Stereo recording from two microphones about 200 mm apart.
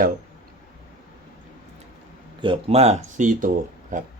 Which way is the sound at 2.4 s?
30° right (ahead or behind).